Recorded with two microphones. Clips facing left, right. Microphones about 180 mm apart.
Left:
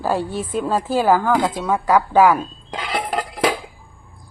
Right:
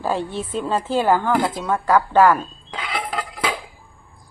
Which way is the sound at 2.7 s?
40° left (ahead or behind).